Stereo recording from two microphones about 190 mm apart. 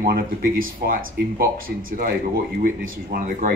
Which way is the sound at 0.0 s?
50° right (ahead or behind).